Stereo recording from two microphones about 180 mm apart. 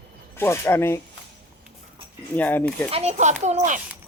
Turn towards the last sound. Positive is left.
turn(degrees=-40)  # may be behind; listen again after turning